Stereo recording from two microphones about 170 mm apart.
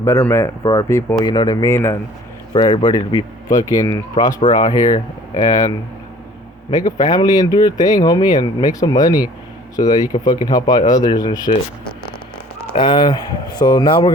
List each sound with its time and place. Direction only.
0.0 s speech: 15° left (ahead or behind)
2.5 s speech: 30° left (ahead or behind)
12.7 s speech: 30° left (ahead or behind)